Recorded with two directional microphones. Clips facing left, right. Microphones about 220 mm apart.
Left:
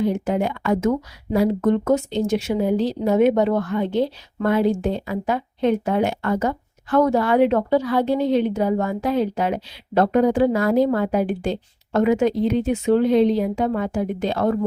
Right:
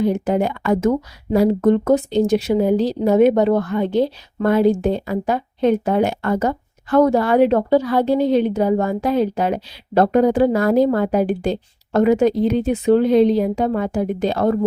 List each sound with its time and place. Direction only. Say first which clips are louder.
0.3 s speech: right 3 dB; 40° right (ahead or behind)